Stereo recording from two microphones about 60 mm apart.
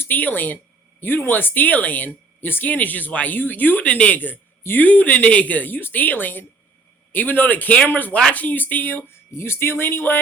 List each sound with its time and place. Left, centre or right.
0.0 s speech: left
9.0 s speech: left